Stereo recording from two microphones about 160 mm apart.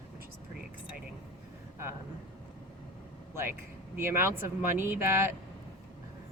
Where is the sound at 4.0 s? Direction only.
15° right (ahead or behind).